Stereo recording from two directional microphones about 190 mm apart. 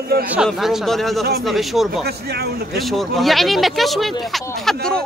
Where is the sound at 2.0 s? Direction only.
55° right (ahead or behind).